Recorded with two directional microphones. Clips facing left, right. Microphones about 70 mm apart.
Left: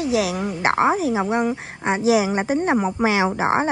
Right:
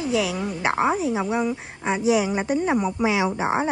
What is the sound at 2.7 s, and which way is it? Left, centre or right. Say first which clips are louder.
Speech: left 2 dB; left.